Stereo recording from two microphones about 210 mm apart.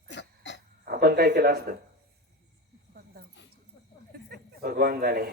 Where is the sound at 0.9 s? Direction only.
45° right (ahead or behind).